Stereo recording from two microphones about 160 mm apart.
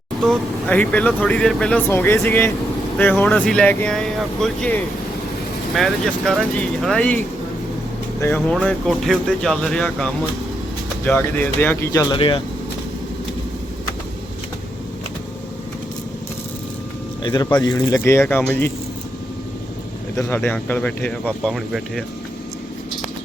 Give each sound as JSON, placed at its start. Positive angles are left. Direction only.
{"t": 0.2, "sound": "speech", "side_deg": 5}
{"t": 8.2, "sound": "speech", "side_deg": 10}
{"t": 8.5, "sound": "speech", "side_deg": 0}
{"t": 12.1, "sound": "speech", "side_deg": 30}
{"t": 17.2, "sound": "speech", "side_deg": 30}
{"t": 20.1, "sound": "speech", "side_deg": 15}